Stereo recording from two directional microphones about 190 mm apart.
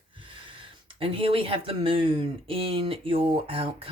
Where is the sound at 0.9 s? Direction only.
30° right (ahead or behind).